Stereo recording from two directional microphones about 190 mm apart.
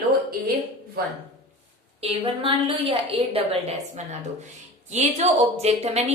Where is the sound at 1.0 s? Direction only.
55° right (ahead or behind).